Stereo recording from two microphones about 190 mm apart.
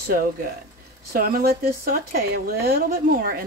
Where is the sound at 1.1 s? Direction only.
50° right (ahead or behind).